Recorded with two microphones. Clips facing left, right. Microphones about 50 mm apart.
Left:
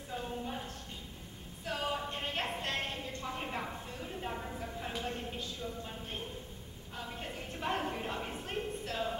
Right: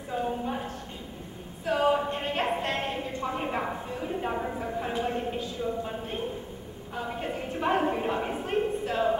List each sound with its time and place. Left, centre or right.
0.1 s clip-clop: centre
1.7 s a capella: right
2.6 s a sound: centre